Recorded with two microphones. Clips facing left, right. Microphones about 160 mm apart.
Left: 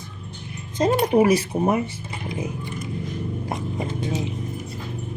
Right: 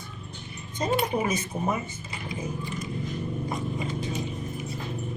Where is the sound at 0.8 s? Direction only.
85° left.